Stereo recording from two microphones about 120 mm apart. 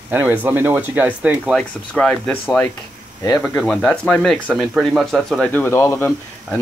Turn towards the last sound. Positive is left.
turn(degrees=20)  # may be behind; listen again after turning